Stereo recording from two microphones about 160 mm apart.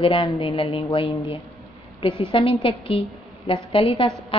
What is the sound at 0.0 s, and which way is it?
A woman's voice, 30° left (ahead or behind).